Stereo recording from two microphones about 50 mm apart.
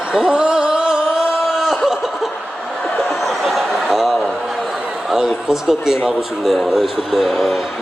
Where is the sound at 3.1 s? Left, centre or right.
Centre.